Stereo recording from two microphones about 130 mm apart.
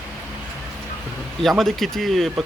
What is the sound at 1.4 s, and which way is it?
Speech, centre (ahead or behind).